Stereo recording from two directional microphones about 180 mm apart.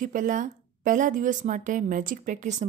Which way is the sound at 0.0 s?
45° right (ahead or behind).